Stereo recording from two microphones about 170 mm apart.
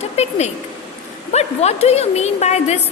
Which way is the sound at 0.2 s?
40° left (ahead or behind).